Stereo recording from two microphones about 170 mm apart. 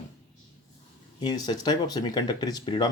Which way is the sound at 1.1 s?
25° left (ahead or behind).